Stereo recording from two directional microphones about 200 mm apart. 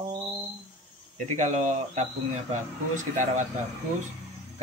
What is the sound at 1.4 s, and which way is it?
A man's voice, 35° right (ahead or behind).